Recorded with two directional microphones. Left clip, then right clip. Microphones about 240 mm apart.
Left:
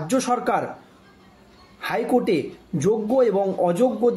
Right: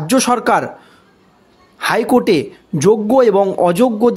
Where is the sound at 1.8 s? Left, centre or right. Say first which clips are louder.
Right 8 dB; right.